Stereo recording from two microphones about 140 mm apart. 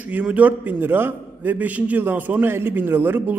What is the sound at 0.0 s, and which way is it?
A man's voice, 10° right (ahead or behind).